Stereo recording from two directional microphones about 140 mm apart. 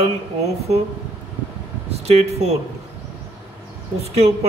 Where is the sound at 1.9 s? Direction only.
50° right (ahead or behind).